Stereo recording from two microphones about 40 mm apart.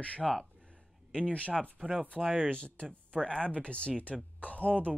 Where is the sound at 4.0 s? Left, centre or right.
Left.